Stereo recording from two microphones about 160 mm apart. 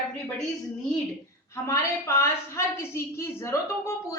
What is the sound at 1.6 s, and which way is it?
A woman's voice, 20° left (ahead or behind).